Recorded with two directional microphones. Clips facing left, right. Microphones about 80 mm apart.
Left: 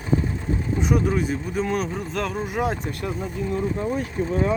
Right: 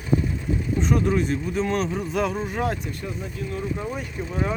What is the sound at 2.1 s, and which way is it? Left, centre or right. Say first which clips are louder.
Speech: right 4 dB; centre.